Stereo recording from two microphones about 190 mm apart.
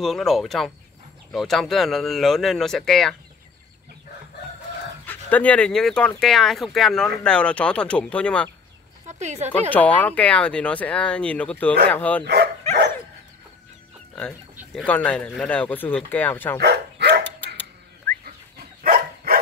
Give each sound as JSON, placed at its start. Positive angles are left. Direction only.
{"t": 0.0, "sound": "speech", "side_deg": 0}
{"t": 5.0, "sound": "speech", "side_deg": 10}
{"t": 9.0, "sound": "speech", "side_deg": -35}
{"t": 9.7, "sound": "speech", "side_deg": 10}
{"t": 14.6, "sound": "speech", "side_deg": 0}
{"t": 16.5, "sound": "dog", "side_deg": -60}
{"t": 18.8, "sound": "dog", "side_deg": -50}